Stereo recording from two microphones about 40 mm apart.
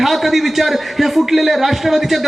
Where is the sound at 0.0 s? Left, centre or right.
Centre.